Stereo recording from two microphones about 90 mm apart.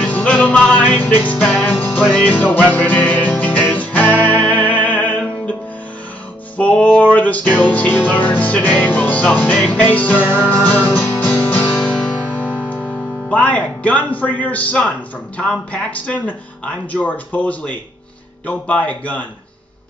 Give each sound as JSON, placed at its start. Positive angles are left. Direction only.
{"t": 0.0, "sound": "music", "side_deg": 15}
{"t": 12.5, "sound": "speech", "side_deg": 15}